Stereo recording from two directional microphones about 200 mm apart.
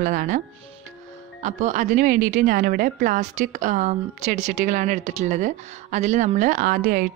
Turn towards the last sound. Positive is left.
turn(degrees=-45)  # may be behind; listen again after turning